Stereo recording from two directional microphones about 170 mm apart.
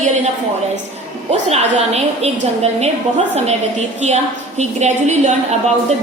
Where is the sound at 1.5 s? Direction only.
40° right (ahead or behind).